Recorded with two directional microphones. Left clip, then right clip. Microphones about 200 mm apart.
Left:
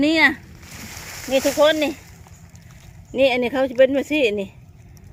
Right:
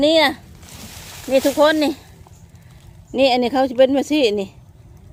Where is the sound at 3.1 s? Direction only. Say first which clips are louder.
Right 2 dB; 10° right (ahead or behind).